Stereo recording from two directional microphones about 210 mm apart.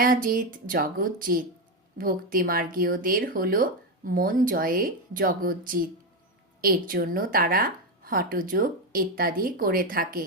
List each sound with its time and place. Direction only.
0.0 s speech: 40° right (ahead or behind)